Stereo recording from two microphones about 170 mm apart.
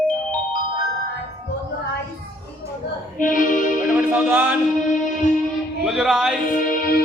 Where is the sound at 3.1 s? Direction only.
50° left (ahead or behind).